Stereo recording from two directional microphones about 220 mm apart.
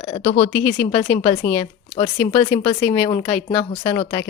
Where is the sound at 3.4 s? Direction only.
20° left (ahead or behind).